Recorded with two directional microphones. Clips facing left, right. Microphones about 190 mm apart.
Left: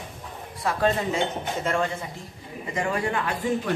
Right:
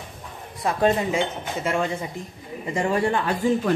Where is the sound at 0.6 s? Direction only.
20° right (ahead or behind).